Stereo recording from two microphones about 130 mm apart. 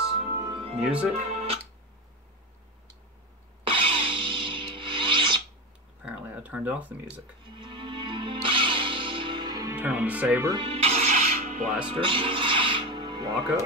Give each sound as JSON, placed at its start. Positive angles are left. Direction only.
{"t": 0.0, "sound": "music", "side_deg": 0}
{"t": 0.5, "sound": "music", "side_deg": -40}
{"t": 0.7, "sound": "speech", "side_deg": -10}
{"t": 1.3, "sound": "music", "side_deg": -50}
{"t": 3.6, "sound": "music", "side_deg": -45}
{"t": 6.0, "sound": "a sound", "side_deg": -10}
{"t": 7.5, "sound": "music", "side_deg": -40}
{"t": 9.8, "sound": "speech", "side_deg": -10}
{"t": 10.6, "sound": "music", "side_deg": -50}
{"t": 11.9, "sound": "music", "side_deg": -40}